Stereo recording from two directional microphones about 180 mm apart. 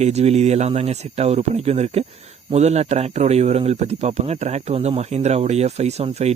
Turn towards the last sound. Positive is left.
turn(degrees=-35)  # may be behind; listen again after turning